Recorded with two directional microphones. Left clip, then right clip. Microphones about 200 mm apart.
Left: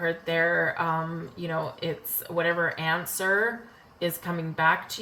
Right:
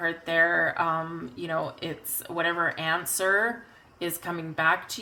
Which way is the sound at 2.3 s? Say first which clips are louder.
Left 1 dB; 50° right (ahead or behind).